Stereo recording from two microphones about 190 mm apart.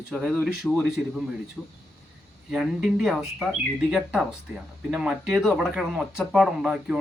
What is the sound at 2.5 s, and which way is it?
Speech, 5° right (ahead or behind).